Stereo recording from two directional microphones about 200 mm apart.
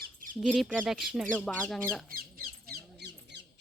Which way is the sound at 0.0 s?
45° right (ahead or behind).